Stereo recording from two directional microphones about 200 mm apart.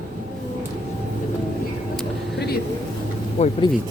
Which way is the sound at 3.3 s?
30° left (ahead or behind).